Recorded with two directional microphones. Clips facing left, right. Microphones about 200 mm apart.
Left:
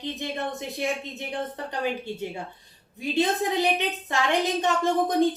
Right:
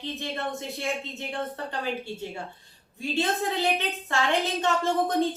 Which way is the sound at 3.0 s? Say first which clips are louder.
Left 3 dB; 15° left (ahead or behind).